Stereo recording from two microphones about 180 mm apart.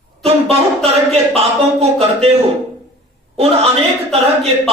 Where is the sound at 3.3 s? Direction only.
35° right (ahead or behind).